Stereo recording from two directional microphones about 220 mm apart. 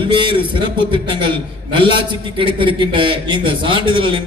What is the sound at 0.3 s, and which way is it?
A man's voice, 20° right (ahead or behind).